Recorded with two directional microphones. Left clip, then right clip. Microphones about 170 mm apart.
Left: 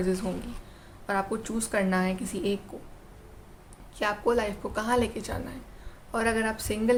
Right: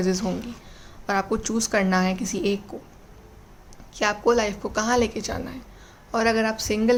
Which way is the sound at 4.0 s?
25° right (ahead or behind).